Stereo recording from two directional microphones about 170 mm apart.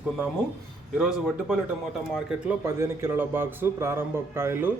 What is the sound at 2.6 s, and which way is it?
A man's voice, 15° right (ahead or behind).